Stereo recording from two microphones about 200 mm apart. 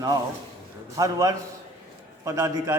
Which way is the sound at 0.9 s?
15° right (ahead or behind).